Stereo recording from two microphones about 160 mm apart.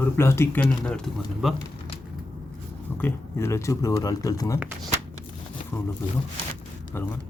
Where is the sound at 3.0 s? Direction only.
15° left (ahead or behind).